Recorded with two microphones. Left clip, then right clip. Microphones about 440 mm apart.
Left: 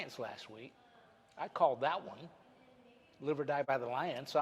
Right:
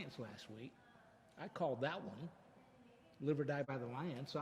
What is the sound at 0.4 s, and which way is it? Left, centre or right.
A man's voice, left.